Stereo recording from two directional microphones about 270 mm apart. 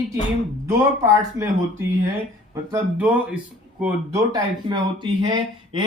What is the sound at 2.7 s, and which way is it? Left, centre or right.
Speech, centre.